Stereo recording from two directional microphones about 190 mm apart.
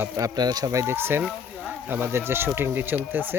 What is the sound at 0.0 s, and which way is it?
Speech, 20° right (ahead or behind).